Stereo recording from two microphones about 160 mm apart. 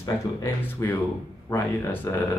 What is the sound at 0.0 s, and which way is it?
Speech, 15° left (ahead or behind).